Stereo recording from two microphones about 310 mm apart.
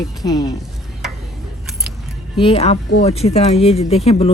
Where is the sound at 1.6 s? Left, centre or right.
Centre.